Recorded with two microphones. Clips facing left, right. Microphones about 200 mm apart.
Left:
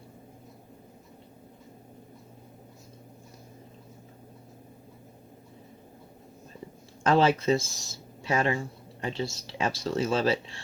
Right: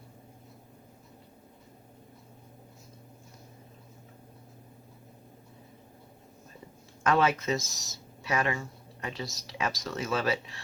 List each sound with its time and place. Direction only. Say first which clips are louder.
7.0 s speech: left 3 dB; 30° left (ahead or behind)